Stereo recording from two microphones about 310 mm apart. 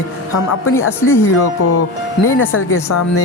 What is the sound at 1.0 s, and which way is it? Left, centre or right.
Speech, centre.